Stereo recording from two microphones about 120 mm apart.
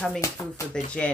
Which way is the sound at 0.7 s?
10° left (ahead or behind).